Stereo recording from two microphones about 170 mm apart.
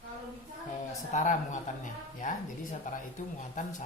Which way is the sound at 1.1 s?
45° left (ahead or behind).